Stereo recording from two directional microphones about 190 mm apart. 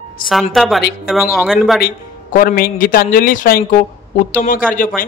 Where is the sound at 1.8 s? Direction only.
45° left (ahead or behind).